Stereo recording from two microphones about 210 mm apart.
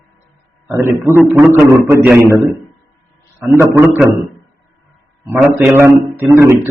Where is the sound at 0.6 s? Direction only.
10° right (ahead or behind).